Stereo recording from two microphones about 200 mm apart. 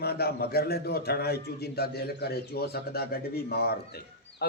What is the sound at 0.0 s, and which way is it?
Speech, 50° left (ahead or behind).